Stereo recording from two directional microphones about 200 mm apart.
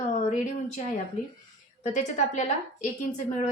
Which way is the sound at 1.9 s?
35° left (ahead or behind).